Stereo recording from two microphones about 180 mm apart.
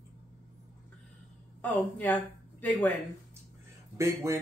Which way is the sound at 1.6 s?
10° left (ahead or behind).